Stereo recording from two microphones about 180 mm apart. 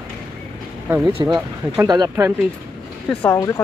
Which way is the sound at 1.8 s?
20° right (ahead or behind).